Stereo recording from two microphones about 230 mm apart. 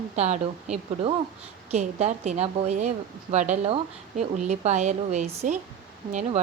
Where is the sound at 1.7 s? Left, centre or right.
Right.